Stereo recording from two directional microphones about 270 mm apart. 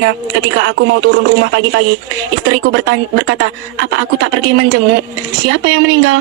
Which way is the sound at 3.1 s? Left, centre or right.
Right.